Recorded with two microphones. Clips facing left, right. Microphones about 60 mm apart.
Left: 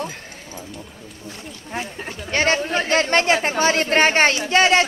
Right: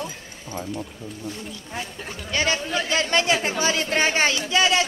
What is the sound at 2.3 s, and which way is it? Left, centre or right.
Speech, left.